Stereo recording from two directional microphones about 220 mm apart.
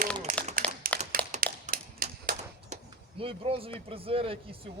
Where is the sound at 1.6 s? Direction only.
40° right (ahead or behind).